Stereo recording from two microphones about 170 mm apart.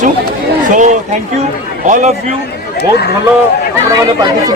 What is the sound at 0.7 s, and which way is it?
A man's voice, 45° right (ahead or behind).